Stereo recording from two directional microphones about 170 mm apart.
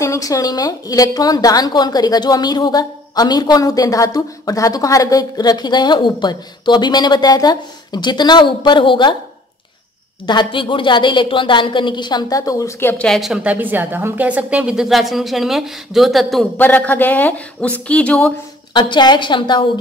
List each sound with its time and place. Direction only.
0.0 s a woman's voice: 20° left (ahead or behind)
10.2 s a woman's voice: 25° left (ahead or behind)
12.9 s a woman's voice: 5° left (ahead or behind)
18.7 s a woman's voice: 25° left (ahead or behind)